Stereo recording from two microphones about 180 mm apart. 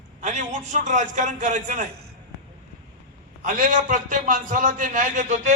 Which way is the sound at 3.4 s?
50° right (ahead or behind).